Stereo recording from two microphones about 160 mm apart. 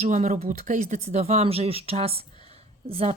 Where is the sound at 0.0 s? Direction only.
50° right (ahead or behind).